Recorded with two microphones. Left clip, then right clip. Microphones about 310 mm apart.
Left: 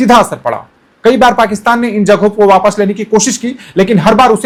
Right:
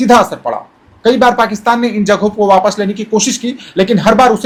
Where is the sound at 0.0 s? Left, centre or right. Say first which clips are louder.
Left 1 dB; left.